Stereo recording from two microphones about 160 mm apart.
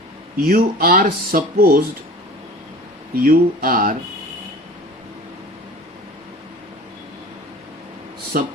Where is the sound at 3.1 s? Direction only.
65° right (ahead or behind).